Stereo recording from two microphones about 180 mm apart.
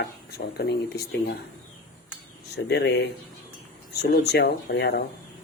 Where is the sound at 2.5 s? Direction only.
70° left (ahead or behind).